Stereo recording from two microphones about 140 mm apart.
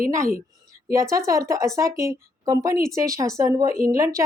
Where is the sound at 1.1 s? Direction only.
20° right (ahead or behind).